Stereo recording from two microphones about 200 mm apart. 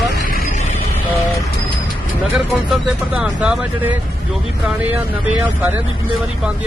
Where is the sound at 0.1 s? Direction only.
50° left (ahead or behind).